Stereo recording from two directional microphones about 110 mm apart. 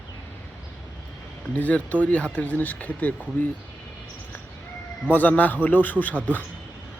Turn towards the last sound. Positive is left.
turn(degrees=15)  # may be behind; listen again after turning